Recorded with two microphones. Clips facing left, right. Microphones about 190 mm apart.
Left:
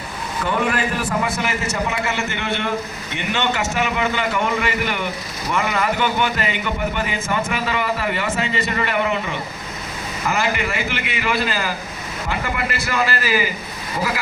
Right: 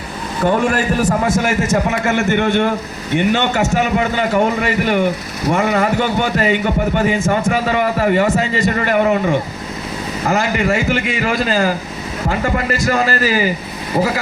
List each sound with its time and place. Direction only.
0.4 s a man's voice: 45° right (ahead or behind)